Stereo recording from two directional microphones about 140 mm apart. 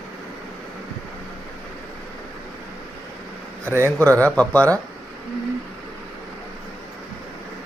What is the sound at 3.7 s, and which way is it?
Speech, 15° right (ahead or behind).